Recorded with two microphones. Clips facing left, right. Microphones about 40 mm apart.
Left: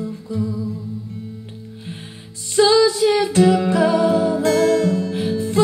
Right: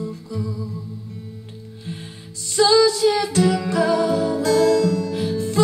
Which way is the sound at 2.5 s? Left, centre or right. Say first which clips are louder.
Left 1 dB; left.